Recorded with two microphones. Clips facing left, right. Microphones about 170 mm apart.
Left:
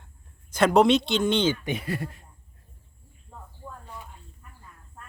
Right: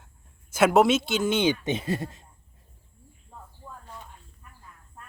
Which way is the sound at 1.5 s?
25° right (ahead or behind).